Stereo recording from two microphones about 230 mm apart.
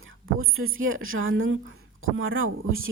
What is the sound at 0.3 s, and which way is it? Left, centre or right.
Speech, right.